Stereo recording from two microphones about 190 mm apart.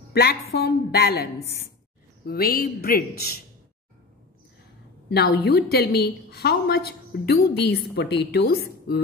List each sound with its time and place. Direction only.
0.1 s a woman's voice: 55° left (ahead or behind)
5.1 s a woman's voice: 55° left (ahead or behind)